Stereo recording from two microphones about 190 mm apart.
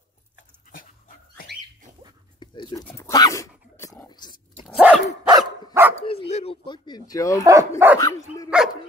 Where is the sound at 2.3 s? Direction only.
25° left (ahead or behind).